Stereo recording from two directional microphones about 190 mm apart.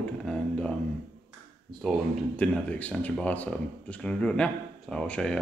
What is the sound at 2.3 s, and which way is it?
Speech, 5° left (ahead or behind).